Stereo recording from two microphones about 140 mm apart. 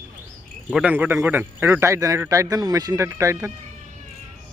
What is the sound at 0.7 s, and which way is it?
A man's voice, 10° right (ahead or behind).